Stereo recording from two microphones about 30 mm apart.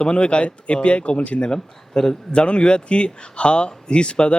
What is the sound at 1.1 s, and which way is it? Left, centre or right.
Speech, left.